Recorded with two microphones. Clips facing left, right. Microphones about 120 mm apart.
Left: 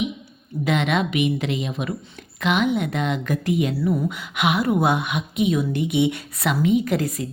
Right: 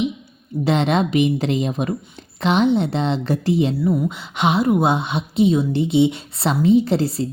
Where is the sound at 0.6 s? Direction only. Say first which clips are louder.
Right 3 dB; 35° right (ahead or behind).